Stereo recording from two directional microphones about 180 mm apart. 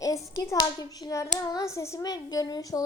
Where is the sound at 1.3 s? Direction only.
15° left (ahead or behind).